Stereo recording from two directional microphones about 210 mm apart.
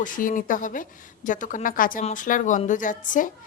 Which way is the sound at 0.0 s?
40° left (ahead or behind).